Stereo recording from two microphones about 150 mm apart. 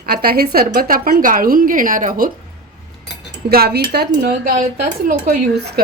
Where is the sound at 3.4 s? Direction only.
90° right.